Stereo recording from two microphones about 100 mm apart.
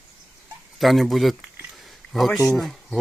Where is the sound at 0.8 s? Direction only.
Centre (ahead or behind).